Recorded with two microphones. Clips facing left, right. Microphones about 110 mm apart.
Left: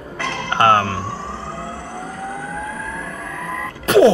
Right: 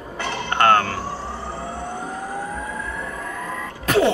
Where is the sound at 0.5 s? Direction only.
20° left (ahead or behind).